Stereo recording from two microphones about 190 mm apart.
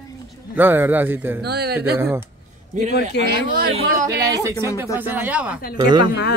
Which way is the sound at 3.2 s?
60° left (ahead or behind).